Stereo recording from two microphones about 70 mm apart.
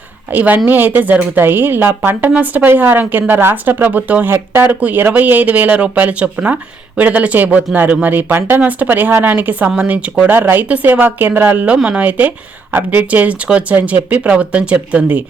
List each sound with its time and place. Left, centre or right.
0.3 s a woman's voice: right